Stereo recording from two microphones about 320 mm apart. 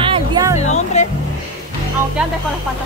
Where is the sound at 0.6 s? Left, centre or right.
Left.